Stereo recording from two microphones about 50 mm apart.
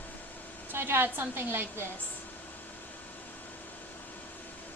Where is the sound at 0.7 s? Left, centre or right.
Right.